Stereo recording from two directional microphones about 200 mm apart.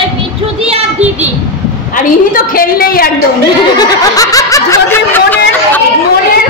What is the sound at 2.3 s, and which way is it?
Speech, 45° left (ahead or behind).